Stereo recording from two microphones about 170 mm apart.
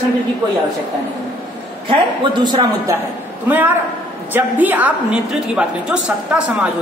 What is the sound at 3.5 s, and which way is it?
A woman's voice, 10° right (ahead or behind).